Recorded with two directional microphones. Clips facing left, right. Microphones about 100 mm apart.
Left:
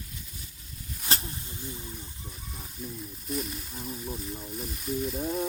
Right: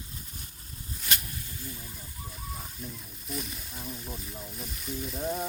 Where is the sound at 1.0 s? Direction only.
30° left (ahead or behind).